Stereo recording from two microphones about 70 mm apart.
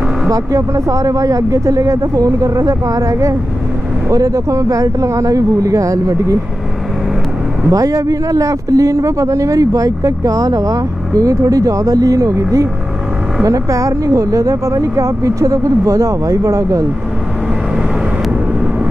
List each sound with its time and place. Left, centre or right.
0.3 s speech: right
7.7 s speech: right